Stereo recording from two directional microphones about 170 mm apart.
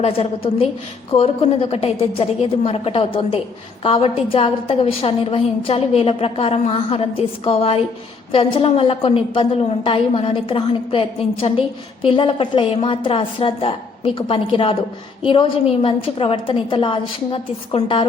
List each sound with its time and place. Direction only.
0.0 s a woman's voice: 35° left (ahead or behind)